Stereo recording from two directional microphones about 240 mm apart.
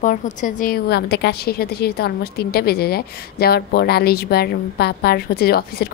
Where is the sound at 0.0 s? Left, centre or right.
Left.